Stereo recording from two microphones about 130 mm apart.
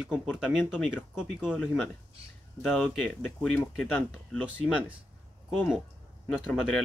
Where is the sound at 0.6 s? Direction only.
15° left (ahead or behind).